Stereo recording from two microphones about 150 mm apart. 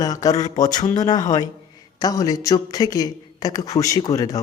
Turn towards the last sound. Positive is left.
turn(degrees=25)  # may be behind; listen again after turning